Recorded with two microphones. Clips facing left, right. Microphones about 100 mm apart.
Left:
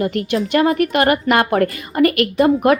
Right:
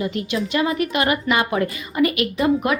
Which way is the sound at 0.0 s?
55° left (ahead or behind).